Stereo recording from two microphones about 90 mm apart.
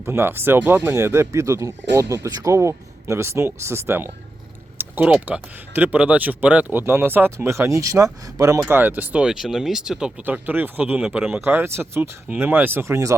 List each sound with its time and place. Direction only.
0.0 s speech: 25° right (ahead or behind)
4.8 s typing: 20° right (ahead or behind)
5.1 s speech: 15° right (ahead or behind); by 8.6 s 35° right (ahead or behind)
8.6 s speech: 20° right (ahead or behind)
10.2 s speech: 20° right (ahead or behind)